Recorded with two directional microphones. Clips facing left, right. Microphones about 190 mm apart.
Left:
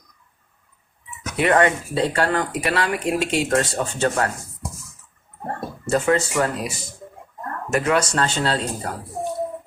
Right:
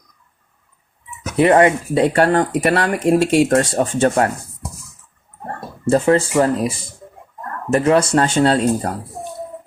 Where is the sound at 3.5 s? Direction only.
30° right (ahead or behind).